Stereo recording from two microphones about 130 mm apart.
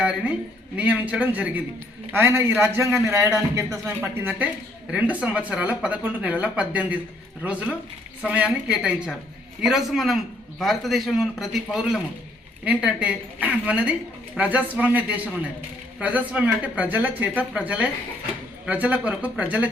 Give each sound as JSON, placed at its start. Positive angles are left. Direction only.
{"t": 0.8, "sound": "a man's voice", "side_deg": -10}